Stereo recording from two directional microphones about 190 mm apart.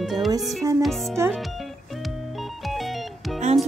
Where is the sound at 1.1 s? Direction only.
15° right (ahead or behind).